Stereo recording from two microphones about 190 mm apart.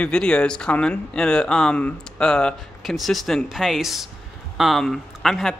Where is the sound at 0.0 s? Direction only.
5° left (ahead or behind).